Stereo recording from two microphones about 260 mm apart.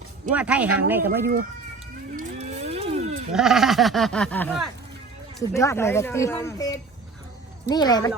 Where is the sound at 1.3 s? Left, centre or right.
Right.